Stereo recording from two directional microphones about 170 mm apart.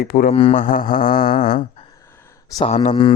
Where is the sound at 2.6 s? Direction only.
40° left (ahead or behind).